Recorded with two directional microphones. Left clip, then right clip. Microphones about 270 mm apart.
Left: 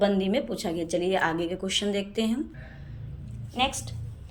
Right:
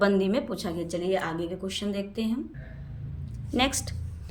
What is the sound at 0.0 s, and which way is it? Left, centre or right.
A woman's voice, centre.